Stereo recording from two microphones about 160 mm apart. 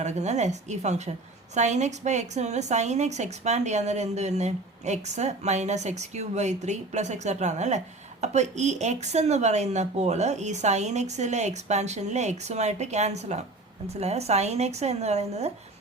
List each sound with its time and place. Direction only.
0.0 s a woman's voice: 45° right (ahead or behind)